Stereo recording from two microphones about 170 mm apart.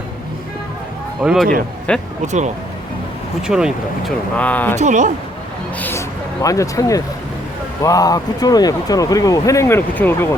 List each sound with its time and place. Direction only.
1.2 s speech: 5° right (ahead or behind)
1.9 s speech: 5° left (ahead or behind)
2.2 s speech: 45° right (ahead or behind)
3.4 s speech: 5° right (ahead or behind)
4.7 s speech: 45° right (ahead or behind)
5.8 s a man's voice: 15° left (ahead or behind)